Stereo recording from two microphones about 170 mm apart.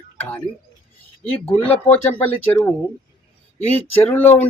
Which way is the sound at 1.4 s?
35° left (ahead or behind).